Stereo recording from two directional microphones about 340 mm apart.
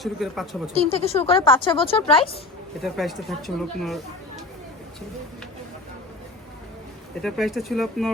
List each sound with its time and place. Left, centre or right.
0.0 s speech: centre
0.7 s speech: centre
2.8 s speech: centre
7.2 s speech: centre